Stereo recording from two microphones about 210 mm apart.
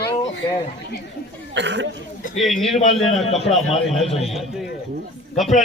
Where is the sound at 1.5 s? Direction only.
55° right (ahead or behind).